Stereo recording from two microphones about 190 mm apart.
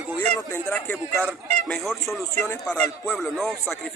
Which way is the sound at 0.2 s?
10° left (ahead or behind).